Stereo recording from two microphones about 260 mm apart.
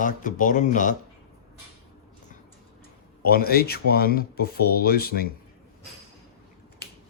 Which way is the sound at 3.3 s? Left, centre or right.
Left.